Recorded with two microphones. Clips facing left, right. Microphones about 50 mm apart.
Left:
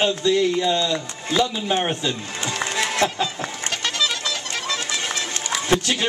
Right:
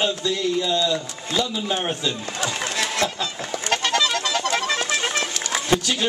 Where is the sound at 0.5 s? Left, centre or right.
Left.